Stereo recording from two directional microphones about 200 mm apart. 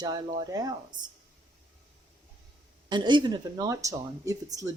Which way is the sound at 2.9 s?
25° right (ahead or behind).